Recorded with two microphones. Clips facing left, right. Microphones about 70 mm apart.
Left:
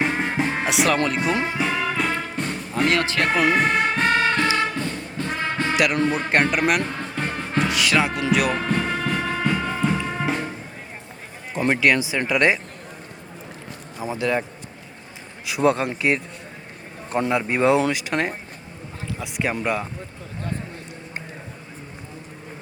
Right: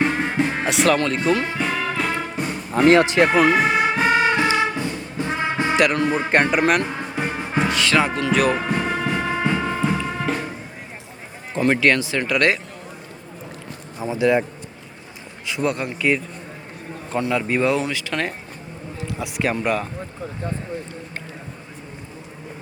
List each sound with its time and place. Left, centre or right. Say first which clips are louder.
0.0 s music: right 2 dB; centre
1.0 s speech: right 2 dB; centre
1.5 s music: even; centre
5.7 s speech: right 3 dB; centre
6.0 s speech: right 1 dB; centre
6.8 s music: right 2 dB; centre
7.7 s music: right 2 dB; centre
8.3 s speech: right 3 dB; centre
8.5 s music: right 1 dB; centre
11.6 s speech: right 1 dB; centre
14.2 s speech: right 6 dB; centre
15.6 s speech: left 4 dB; left
17.2 s speech: even; left
19.2 s speech: right 2 dB; centre